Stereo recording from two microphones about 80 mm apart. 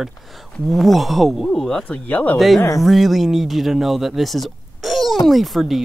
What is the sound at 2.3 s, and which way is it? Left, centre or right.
Speech, centre.